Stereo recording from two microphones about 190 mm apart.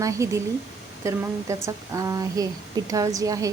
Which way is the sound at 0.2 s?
15° right (ahead or behind).